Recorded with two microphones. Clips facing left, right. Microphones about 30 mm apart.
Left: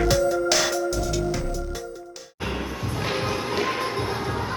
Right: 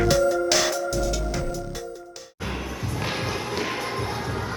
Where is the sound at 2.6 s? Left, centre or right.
Left.